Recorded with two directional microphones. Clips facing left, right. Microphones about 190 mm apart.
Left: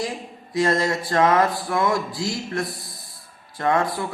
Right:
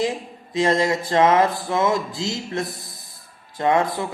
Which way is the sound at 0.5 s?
20° right (ahead or behind).